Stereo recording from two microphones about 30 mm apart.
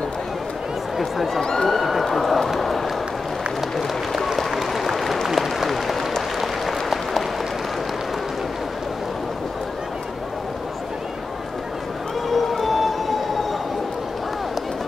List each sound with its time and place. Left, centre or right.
0.9 s speech: centre
1.4 s speech: centre
1.8 s speech: centre
2.6 s run: centre
4.1 s applause: centre
5.7 s applause: centre
12.3 s a sound: centre